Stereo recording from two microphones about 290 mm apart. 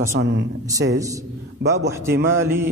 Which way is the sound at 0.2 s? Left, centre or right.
Right.